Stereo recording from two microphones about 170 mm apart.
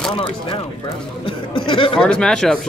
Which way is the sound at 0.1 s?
30° left (ahead or behind).